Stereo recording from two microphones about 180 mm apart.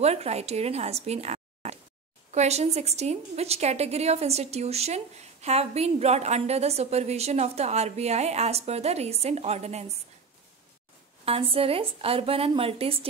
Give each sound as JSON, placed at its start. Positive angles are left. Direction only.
{"t": 0.0, "sound": "a woman's voice", "side_deg": -35}
{"t": 11.2, "sound": "a woman's voice", "side_deg": -30}